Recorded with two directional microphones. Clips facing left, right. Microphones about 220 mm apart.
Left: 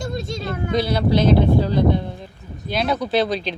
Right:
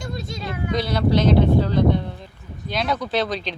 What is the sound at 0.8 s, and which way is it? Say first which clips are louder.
Speech: left 2 dB; 10° left (ahead or behind).